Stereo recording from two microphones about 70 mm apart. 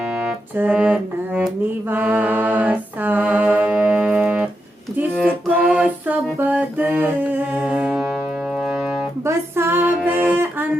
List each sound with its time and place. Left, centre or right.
0.1 s music: centre
0.5 s a sound: right
1.9 s music: right
5.5 s music: centre
9.2 s music: right
9.8 s music: right